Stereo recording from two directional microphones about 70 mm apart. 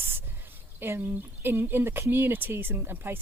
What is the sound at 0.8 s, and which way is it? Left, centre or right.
Speech, right.